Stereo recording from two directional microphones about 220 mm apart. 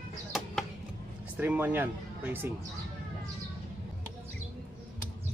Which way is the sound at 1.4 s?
10° right (ahead or behind).